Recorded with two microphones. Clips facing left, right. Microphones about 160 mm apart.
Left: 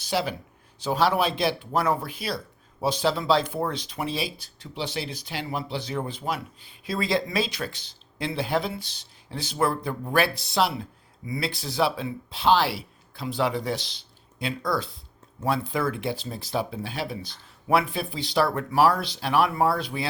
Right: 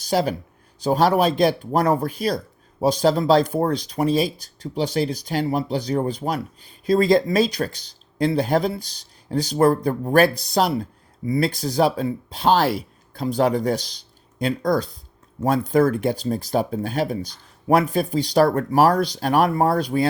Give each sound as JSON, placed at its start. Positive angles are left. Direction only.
{"t": 0.0, "sound": "speech", "side_deg": -40}